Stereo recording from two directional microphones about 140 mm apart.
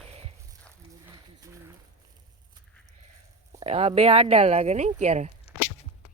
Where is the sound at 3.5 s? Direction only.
50° right (ahead or behind).